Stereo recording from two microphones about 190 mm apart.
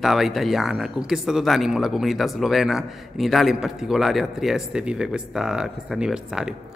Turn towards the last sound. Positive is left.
turn(degrees=-5)  # may be behind; listen again after turning